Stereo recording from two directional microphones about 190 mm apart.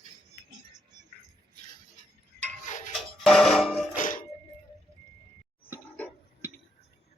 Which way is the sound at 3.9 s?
45° left (ahead or behind).